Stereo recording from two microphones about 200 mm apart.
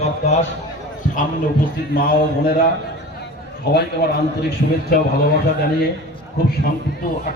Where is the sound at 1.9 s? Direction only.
45° left (ahead or behind).